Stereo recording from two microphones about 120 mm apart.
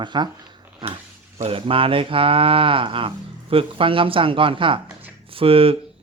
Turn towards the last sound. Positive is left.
turn(degrees=-50)  # may be behind; listen again after turning